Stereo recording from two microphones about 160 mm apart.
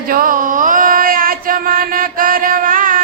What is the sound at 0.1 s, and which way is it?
Music, 60° right (ahead or behind).